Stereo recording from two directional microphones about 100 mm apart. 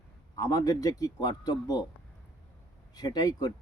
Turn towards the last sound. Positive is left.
turn(degrees=40)  # may be behind; listen again after turning